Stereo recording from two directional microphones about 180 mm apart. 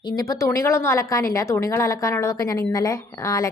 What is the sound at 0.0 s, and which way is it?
A woman's voice, 20° left (ahead or behind).